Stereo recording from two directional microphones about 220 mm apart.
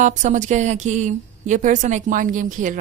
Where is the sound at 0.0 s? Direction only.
35° right (ahead or behind).